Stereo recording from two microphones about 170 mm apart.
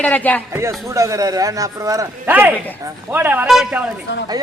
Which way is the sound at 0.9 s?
20° right (ahead or behind).